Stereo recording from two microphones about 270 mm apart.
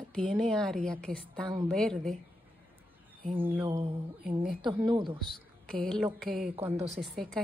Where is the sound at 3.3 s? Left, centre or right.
Centre.